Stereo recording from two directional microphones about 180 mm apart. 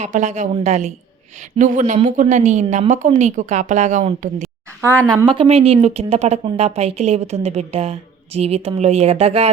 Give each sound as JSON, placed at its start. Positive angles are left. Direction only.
{"t": 0.0, "sound": "speech", "side_deg": -40}
{"t": 5.0, "sound": "speech", "side_deg": -25}